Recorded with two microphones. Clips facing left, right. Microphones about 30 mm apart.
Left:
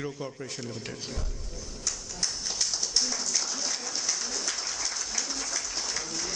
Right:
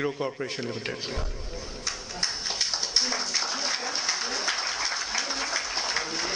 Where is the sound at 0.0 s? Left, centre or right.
Right.